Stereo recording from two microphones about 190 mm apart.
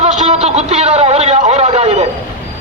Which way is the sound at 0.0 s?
35° right (ahead or behind).